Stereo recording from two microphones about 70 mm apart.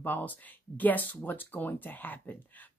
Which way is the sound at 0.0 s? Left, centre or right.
Left.